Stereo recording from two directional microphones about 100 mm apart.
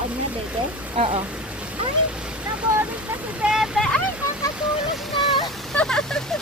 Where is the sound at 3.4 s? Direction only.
5° right (ahead or behind).